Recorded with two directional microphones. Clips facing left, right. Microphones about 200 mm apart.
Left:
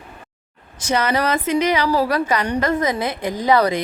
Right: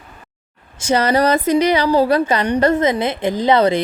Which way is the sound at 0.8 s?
30° right (ahead or behind).